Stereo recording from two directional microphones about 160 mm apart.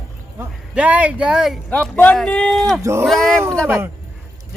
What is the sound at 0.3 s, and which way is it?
Speech, 5° right (ahead or behind).